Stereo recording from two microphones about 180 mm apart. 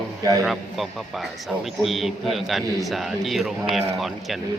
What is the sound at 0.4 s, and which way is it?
A man's voice, centre (ahead or behind).